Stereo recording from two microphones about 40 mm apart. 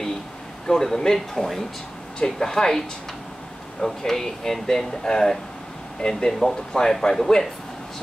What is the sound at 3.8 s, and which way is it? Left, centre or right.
Speech, centre.